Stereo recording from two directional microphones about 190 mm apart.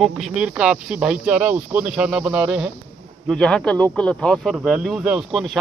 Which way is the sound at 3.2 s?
5° left (ahead or behind).